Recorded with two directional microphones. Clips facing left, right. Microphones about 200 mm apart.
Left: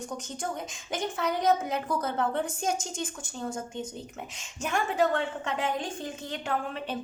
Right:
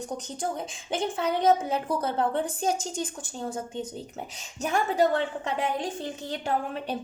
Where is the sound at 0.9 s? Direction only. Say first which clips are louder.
Right 3 dB; 30° right (ahead or behind).